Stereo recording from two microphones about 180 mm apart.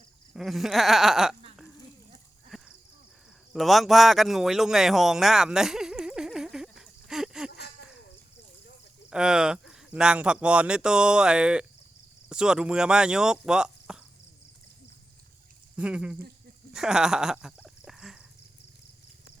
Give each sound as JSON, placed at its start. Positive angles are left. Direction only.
{"t": 0.3, "sound": "speech", "side_deg": 0}
{"t": 2.5, "sound": "cricket", "side_deg": 0}
{"t": 3.5, "sound": "a sound", "side_deg": 0}
{"t": 9.0, "sound": "speech", "side_deg": -5}
{"t": 15.7, "sound": "speech", "side_deg": -5}
{"t": 16.7, "sound": "a sound", "side_deg": -5}